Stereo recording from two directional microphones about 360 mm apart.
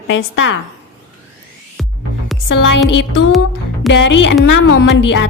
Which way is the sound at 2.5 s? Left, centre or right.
Left.